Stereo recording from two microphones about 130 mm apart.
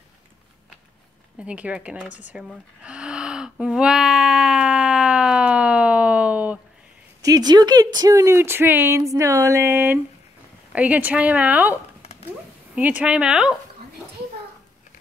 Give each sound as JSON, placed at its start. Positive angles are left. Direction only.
{"t": 1.4, "sound": "music", "side_deg": -10}
{"t": 7.2, "sound": "speech", "side_deg": -30}
{"t": 12.0, "sound": "a sound", "side_deg": 50}
{"t": 12.7, "sound": "speech", "side_deg": -10}